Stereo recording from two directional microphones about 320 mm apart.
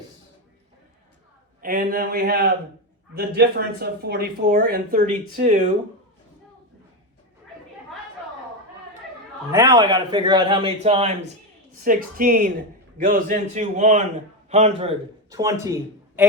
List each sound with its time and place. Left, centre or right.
1.6 s speech: right
9.5 s a man's voice: centre